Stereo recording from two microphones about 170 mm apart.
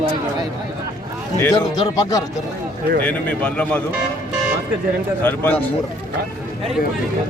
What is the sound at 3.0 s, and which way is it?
Speech, 10° left (ahead or behind).